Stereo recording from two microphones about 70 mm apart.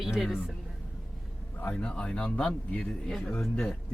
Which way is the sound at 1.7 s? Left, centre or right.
Centre.